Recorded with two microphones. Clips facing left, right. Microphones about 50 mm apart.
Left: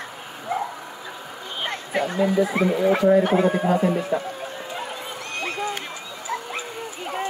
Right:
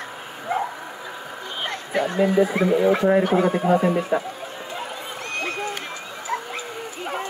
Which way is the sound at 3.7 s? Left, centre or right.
Right.